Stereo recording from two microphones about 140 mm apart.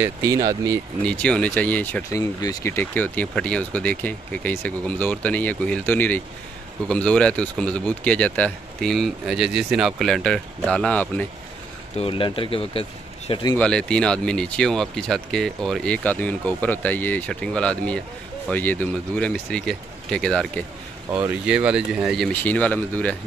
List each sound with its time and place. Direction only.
0.0 s speech: 25° right (ahead or behind)
1.0 s speech: 10° left (ahead or behind)
2.0 s speech: 20° left (ahead or behind)
12.0 s speech: 40° left (ahead or behind)
13.3 s speech: 30° left (ahead or behind)
13.6 s speech: 5° left (ahead or behind)
21.1 s speech: 10° right (ahead or behind)
22.3 s speech: 10° left (ahead or behind)